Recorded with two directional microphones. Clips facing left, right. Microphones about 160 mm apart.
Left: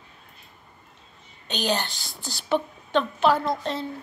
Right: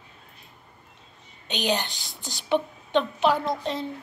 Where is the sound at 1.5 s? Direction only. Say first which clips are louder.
Even; 15° right (ahead or behind).